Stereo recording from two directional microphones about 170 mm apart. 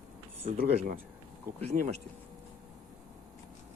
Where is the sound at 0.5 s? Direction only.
55° right (ahead or behind).